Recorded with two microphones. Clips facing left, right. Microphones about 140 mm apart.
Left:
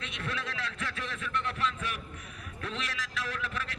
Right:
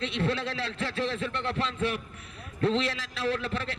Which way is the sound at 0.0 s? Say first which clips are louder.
Right 9 dB; 30° right (ahead or behind).